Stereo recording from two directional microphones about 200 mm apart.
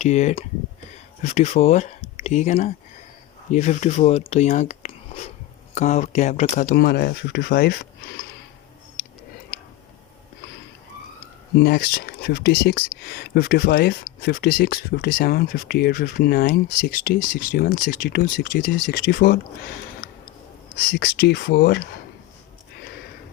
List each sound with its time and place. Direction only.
0.0 s speech: 35° left (ahead or behind)
6.7 s speech: 50° left (ahead or behind)
11.5 s speech: 50° left (ahead or behind)
20.9 s speech: 50° left (ahead or behind)